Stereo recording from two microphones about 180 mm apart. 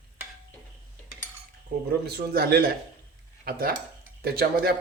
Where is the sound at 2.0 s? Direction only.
60° right (ahead or behind).